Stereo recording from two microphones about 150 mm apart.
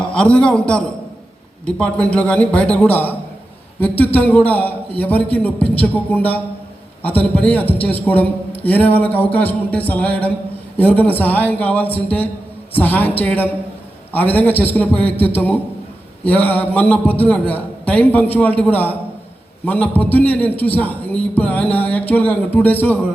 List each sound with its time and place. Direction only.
0.0 s a man's voice: 5° left (ahead or behind)